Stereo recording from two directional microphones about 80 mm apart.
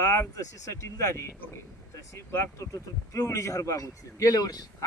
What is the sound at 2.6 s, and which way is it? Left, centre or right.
A man's voice, left.